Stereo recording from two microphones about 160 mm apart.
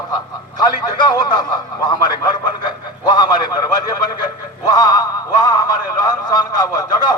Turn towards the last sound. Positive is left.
turn(degrees=25)  # may be behind; listen again after turning